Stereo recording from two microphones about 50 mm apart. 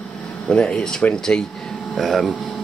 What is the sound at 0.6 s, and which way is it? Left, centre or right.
Speech, centre.